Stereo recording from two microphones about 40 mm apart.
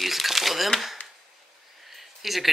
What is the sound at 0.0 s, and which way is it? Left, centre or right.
Crumpling, centre.